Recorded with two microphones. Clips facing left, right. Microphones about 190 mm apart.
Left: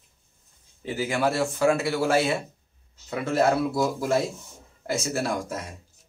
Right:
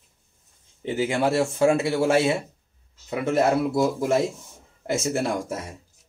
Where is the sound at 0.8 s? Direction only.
25° right (ahead or behind).